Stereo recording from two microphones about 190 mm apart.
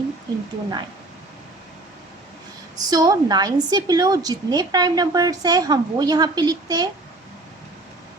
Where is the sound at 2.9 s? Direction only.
20° right (ahead or behind).